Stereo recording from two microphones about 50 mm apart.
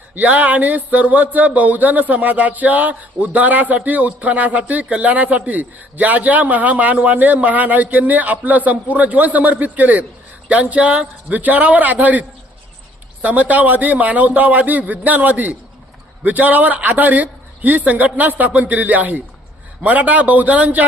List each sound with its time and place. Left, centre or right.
0.2 s speech: right
13.2 s speech: right